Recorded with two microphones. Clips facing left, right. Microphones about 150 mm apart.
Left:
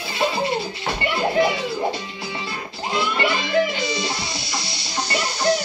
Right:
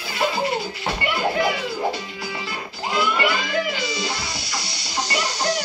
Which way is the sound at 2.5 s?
25° left (ahead or behind).